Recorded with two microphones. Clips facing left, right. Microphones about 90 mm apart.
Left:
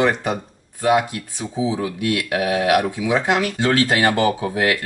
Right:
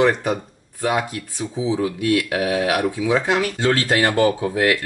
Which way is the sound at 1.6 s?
20° left (ahead or behind).